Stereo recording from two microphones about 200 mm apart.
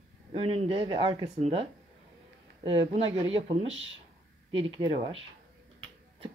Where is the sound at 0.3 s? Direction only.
25° right (ahead or behind).